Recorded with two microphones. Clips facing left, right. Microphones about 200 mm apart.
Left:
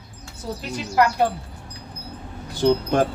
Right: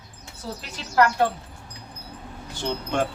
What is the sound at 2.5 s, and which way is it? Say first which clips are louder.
Speech: left 8 dB; 35° left (ahead or behind).